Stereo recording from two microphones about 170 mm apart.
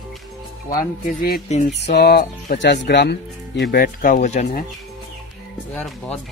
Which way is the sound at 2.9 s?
80° left.